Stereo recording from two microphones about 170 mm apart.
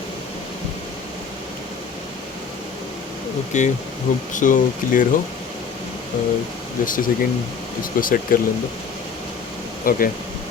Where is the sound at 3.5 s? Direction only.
45° left (ahead or behind).